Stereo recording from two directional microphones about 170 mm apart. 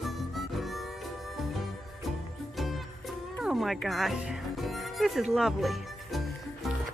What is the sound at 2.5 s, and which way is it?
Music, centre (ahead or behind).